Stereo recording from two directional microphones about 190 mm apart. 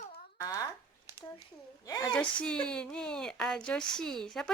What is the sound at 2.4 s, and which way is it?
A woman's voice, 5° left (ahead or behind).